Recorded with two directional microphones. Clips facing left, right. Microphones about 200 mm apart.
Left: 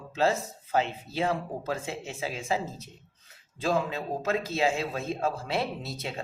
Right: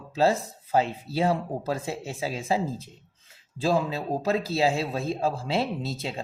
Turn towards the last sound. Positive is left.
turn(degrees=-30)  # may be behind; listen again after turning